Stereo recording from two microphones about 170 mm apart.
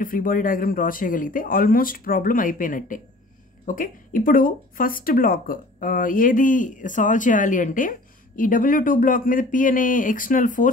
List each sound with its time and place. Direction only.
0.0 s speech: 55° left (ahead or behind)